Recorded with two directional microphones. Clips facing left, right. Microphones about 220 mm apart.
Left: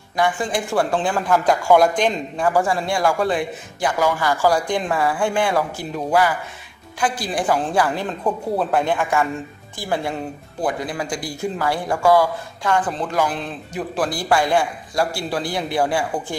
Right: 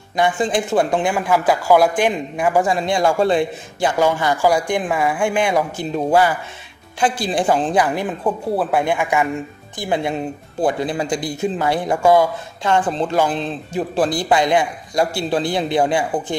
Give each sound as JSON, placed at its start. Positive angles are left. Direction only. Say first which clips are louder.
{"t": 0.1, "sound": "speech", "louder": "right 3 dB", "side_deg": -20}